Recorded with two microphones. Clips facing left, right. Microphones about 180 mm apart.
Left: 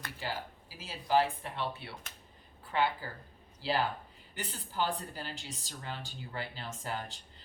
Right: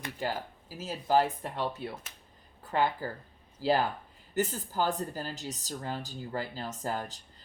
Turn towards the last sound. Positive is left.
turn(degrees=-40)  # may be behind; listen again after turning